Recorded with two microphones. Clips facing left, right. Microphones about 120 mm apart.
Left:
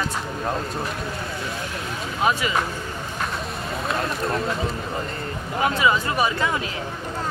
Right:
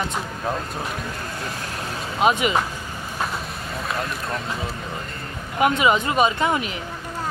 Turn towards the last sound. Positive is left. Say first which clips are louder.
# right 3 dB
turn(degrees=-20)  # may be behind; listen again after turning